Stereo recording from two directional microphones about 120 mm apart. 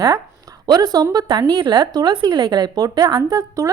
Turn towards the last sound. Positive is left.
turn(degrees=-30)  # may be behind; listen again after turning